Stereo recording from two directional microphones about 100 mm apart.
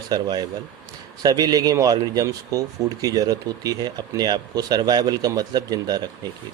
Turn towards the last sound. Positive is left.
turn(degrees=-40)  # may be behind; listen again after turning